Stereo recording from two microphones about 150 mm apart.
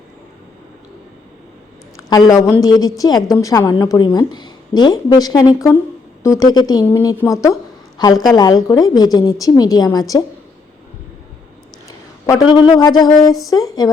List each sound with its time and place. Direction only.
2.0 s a woman's voice: 25° left (ahead or behind)
11.9 s a woman's voice: 20° left (ahead or behind)